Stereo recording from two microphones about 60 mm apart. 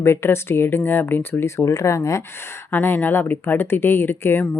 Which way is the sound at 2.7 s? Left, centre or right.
Left.